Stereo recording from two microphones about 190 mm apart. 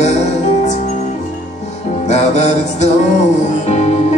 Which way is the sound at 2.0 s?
35° left (ahead or behind).